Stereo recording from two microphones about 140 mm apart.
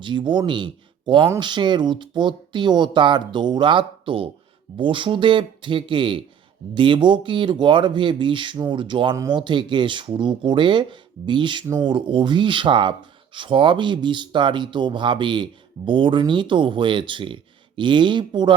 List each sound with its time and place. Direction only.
0.0 s speech: 35° right (ahead or behind)